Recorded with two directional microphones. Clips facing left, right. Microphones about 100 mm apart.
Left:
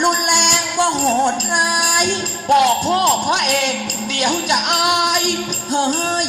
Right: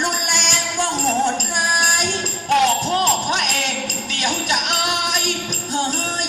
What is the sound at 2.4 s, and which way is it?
Music, 10° left (ahead or behind).